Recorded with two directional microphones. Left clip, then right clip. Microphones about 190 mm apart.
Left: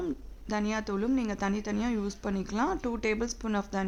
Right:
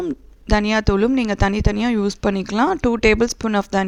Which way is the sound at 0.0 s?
45° right (ahead or behind).